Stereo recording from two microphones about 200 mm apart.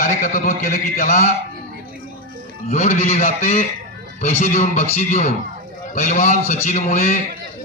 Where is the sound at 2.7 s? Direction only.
35° left (ahead or behind).